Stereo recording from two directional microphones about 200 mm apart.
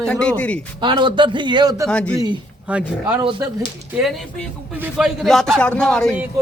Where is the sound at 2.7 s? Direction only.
5° right (ahead or behind).